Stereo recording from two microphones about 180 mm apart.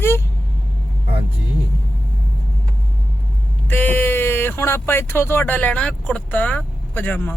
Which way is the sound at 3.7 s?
10° left (ahead or behind).